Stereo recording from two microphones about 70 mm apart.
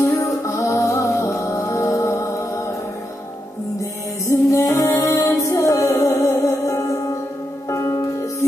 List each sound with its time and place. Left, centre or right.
0.0 s music: left
4.3 s music: left